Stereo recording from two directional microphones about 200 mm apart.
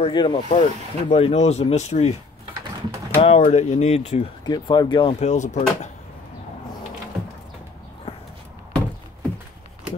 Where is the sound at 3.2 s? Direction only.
30° left (ahead or behind).